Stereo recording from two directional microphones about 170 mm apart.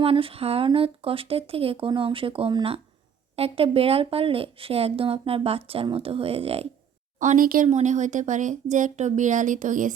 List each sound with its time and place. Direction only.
0.0 s a woman's voice: 35° right (ahead or behind)
7.2 s speech: 50° right (ahead or behind)